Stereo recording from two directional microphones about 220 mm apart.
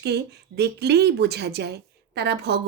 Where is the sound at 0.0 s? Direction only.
50° right (ahead or behind).